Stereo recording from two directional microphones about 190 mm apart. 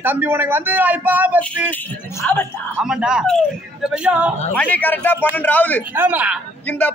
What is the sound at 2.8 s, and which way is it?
A man's voice, 5° right (ahead or behind).